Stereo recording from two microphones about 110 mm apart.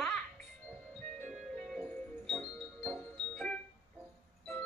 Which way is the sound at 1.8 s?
20° left (ahead or behind).